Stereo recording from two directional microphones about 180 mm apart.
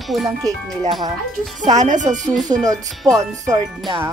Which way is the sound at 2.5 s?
25° right (ahead or behind).